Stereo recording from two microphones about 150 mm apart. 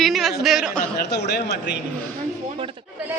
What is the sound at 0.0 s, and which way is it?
Speech, centre (ahead or behind).